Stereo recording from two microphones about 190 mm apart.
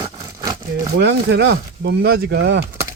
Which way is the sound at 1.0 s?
65° right (ahead or behind).